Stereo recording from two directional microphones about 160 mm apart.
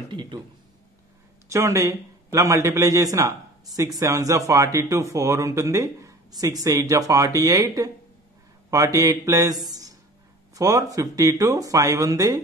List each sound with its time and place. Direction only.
0.1 s speech: 30° right (ahead or behind)
1.5 s a man's voice: 20° right (ahead or behind)